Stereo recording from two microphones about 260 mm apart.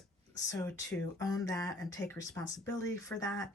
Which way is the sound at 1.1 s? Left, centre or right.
Centre.